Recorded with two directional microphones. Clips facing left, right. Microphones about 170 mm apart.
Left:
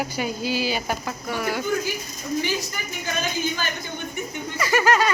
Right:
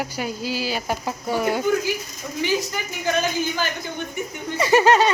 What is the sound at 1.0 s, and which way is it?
Speech, 30° right (ahead or behind).